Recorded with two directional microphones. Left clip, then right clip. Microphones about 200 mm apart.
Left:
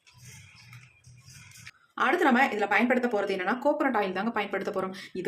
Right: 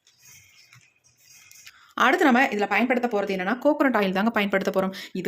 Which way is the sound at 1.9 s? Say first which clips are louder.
Right 5 dB; 45° right (ahead or behind).